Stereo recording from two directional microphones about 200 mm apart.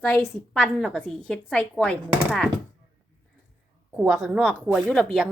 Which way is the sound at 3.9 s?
Centre (ahead or behind).